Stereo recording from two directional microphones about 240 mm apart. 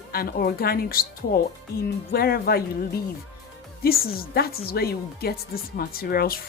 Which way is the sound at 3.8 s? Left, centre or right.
Left.